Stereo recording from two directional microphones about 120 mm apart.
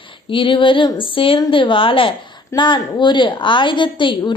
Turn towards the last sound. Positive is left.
turn(degrees=40)  # may be behind; listen again after turning